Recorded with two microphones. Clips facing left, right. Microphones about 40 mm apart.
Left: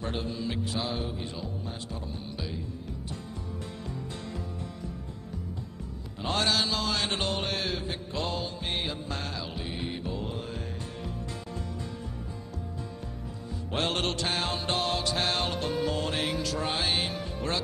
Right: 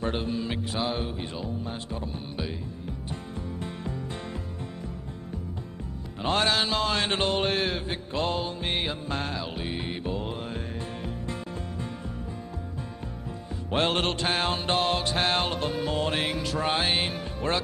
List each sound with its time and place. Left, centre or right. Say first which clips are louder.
0.0 s speech: right 4 dB; right
3.1 s music: right 3 dB; right
6.1 s speech: right 3 dB; right
7.9 s music: right 4 dB; right
13.7 s music: right 4 dB; right